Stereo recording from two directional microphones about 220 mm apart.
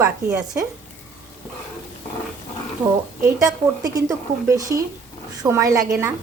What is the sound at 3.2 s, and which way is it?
A woman's voice, 10° right (ahead or behind).